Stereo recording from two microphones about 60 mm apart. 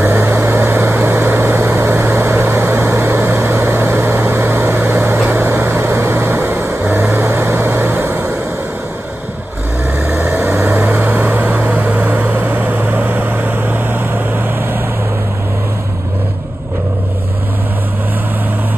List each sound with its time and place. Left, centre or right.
0.0 s vehicle: right
3.5 s a sound: right
5.3 s vehicle: right
10.0 s vehicle: centre; by 14.8 s right